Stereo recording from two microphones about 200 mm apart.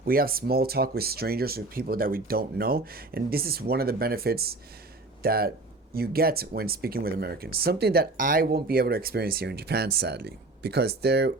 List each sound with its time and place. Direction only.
0.0 s speech: 45° right (ahead or behind)